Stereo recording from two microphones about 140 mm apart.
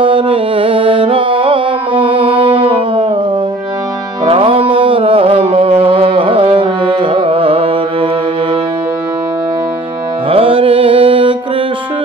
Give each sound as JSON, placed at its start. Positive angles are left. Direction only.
{"t": 0.0, "sound": "music", "side_deg": -40}
{"t": 4.3, "sound": "music", "side_deg": -40}
{"t": 10.3, "sound": "music", "side_deg": -40}